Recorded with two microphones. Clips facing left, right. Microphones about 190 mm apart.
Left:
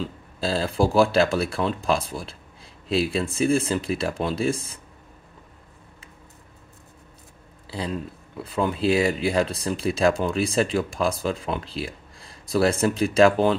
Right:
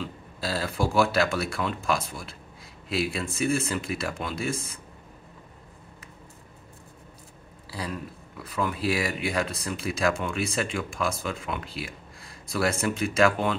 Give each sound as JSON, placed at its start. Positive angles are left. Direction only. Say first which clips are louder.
{"t": 0.0, "sound": "speech", "louder": "left 5 dB", "side_deg": 30}
{"t": 7.7, "sound": "speech", "louder": "left 5 dB", "side_deg": 25}